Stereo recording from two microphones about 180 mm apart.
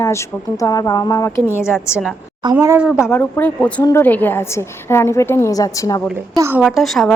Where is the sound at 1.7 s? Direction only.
5° right (ahead or behind).